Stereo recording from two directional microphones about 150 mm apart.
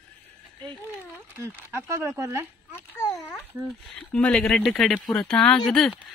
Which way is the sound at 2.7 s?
15° left (ahead or behind).